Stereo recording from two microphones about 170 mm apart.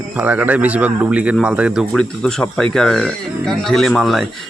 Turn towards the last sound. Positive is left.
turn(degrees=0)  # may be behind; listen again after turning